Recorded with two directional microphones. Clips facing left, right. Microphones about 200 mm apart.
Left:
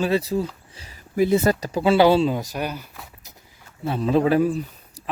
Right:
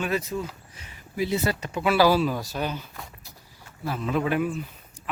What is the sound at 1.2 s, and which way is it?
Speech, 50° left (ahead or behind).